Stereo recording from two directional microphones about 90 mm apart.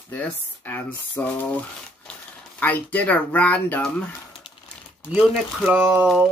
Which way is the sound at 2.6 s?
20° left (ahead or behind).